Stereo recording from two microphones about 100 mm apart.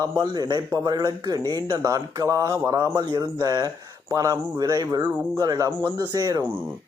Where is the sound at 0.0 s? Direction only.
45° right (ahead or behind).